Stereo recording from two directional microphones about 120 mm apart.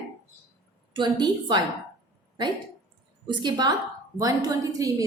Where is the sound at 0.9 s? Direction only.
40° right (ahead or behind).